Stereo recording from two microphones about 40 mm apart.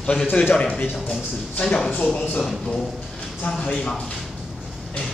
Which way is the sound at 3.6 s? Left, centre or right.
Left.